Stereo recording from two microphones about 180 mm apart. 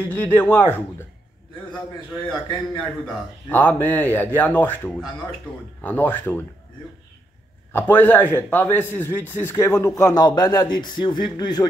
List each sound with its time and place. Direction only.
0.0 s a man's voice: 10° left (ahead or behind)
3.4 s a man's voice: 10° left (ahead or behind)
7.7 s a man's voice: 10° left (ahead or behind)